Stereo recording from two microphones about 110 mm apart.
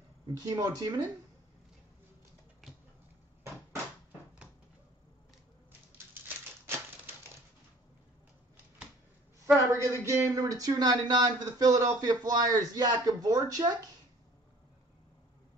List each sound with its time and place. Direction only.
0.3 s speech: 35° right (ahead or behind)
2.6 s a sound: 5° right (ahead or behind)
9.7 s speech: 30° right (ahead or behind)